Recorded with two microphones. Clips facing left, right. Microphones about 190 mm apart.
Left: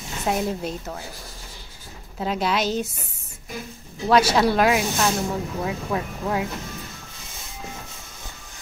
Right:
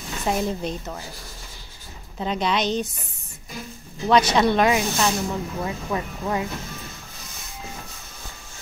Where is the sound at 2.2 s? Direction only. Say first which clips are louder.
Even; 5° left (ahead or behind).